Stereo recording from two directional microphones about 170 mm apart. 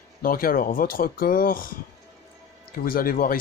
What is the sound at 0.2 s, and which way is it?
Speech, 60° left (ahead or behind).